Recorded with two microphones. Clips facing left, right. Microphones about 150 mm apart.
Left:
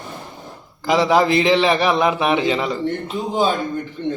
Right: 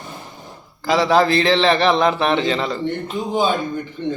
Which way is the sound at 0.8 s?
15° left (ahead or behind).